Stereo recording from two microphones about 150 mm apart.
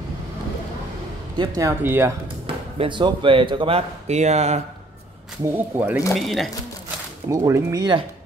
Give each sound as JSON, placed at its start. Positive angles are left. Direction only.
{"t": 1.4, "sound": "speech", "side_deg": -25}
{"t": 1.8, "sound": "speech", "side_deg": -15}
{"t": 2.4, "sound": "speech", "side_deg": -35}
{"t": 5.4, "sound": "speech", "side_deg": -10}
{"t": 6.1, "sound": "speech", "side_deg": 0}
{"t": 7.2, "sound": "speech", "side_deg": -20}